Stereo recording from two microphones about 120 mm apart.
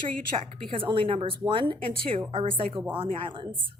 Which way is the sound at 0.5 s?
45° right (ahead or behind).